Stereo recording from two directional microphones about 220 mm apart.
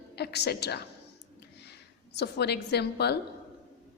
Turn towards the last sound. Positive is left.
turn(degrees=50)  # may be behind; listen again after turning